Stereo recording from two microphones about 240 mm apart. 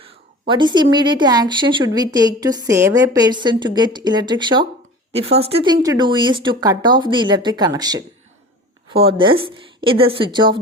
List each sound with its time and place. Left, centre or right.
0.0 s a woman's voice: centre